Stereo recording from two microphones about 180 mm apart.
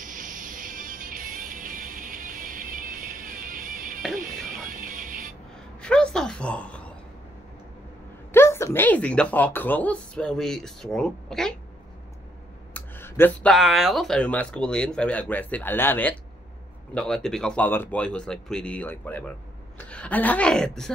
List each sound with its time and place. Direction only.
0.0 s music: 45° right (ahead or behind)
5.8 s a sound: 5° left (ahead or behind)
8.3 s speech: 15° left (ahead or behind)
12.7 s a woman's voice: 10° left (ahead or behind)